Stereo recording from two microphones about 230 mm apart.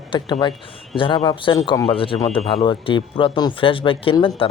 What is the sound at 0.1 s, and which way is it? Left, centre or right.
A man's voice, left.